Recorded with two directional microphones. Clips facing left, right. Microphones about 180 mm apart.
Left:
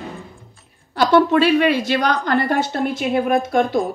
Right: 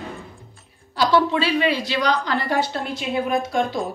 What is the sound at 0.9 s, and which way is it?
A woman's voice, 55° left (ahead or behind).